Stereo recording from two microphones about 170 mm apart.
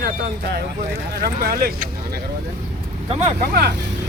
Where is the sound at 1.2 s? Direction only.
60° right (ahead or behind).